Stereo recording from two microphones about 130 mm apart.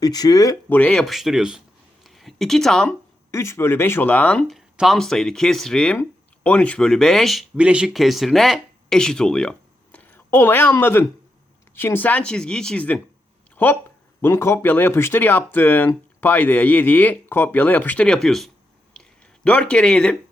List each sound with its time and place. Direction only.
0.0 s speech: 30° left (ahead or behind)
0.7 s speech: 10° left (ahead or behind)
2.0 s a sound: centre (ahead or behind)
3.3 s speech: 20° left (ahead or behind); by 7.4 s centre (ahead or behind)
7.5 s speech: 10° right (ahead or behind); by 13.0 s 10° left (ahead or behind)
14.2 s speech: 20° left (ahead or behind)